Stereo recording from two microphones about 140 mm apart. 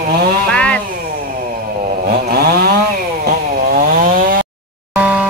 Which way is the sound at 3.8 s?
80° right.